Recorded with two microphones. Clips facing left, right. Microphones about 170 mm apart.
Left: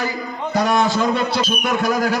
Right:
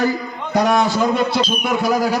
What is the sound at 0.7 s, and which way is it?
A man's voice, 15° right (ahead or behind).